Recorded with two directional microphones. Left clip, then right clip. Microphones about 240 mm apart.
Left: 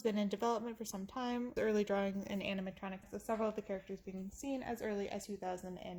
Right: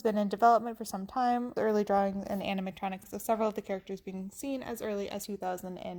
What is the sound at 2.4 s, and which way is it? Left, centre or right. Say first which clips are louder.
Speech: right 8 dB; right.